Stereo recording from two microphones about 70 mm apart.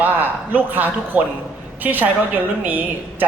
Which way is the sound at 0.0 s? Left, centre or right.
Right.